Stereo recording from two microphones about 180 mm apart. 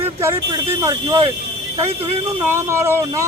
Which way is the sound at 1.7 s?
30° right (ahead or behind).